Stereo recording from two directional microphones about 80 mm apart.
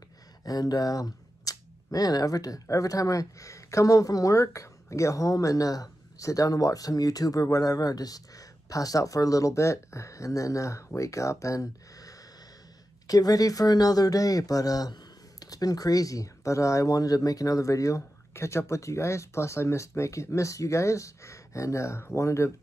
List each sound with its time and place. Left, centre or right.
0.5 s speech: left